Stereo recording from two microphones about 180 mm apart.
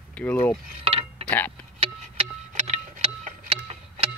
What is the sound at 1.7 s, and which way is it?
Tick-tock, 35° right (ahead or behind).